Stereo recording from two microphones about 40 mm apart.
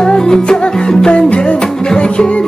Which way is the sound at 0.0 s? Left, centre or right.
Centre.